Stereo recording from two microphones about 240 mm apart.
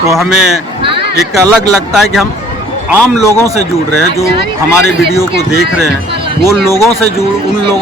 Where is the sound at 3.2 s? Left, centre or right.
Centre.